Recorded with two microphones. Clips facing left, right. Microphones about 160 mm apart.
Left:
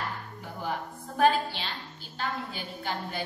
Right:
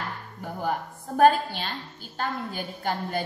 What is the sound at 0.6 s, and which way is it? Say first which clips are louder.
A woman's voice: right 4 dB; 45° right (ahead or behind).